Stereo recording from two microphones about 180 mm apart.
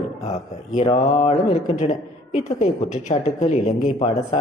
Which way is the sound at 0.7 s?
35° left (ahead or behind).